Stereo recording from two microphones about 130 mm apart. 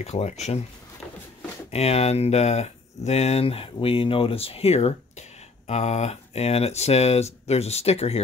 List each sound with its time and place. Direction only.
0.0 s speech: 60° left (ahead or behind)
1.7 s speech: 50° left (ahead or behind)